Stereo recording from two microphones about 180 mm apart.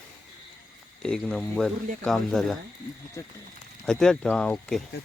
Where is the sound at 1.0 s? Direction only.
5° left (ahead or behind).